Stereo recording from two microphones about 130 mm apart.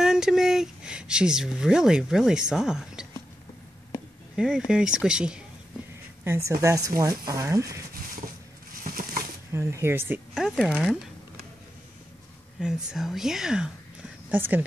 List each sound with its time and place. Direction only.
0.0 s speech: 5° right (ahead or behind)
4.4 s speech: 5° right (ahead or behind)
6.2 s speech: 20° right (ahead or behind)
8.8 s a sound: 90° right
9.5 s speech: 20° right (ahead or behind)
10.7 s speech: 5° right (ahead or behind)
12.5 s speech: centre (ahead or behind)